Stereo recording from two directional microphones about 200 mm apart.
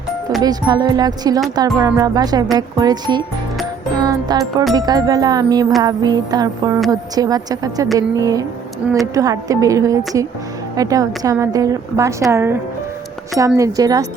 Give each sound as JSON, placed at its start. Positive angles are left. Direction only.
{"t": 0.4, "sound": "speech", "side_deg": -20}
{"t": 3.9, "sound": "music", "side_deg": -20}
{"t": 4.7, "sound": "a woman's voice", "side_deg": -20}
{"t": 8.8, "sound": "speech", "side_deg": -5}
{"t": 9.1, "sound": "a woman's voice", "side_deg": -15}
{"t": 13.6, "sound": "a woman's voice", "side_deg": -15}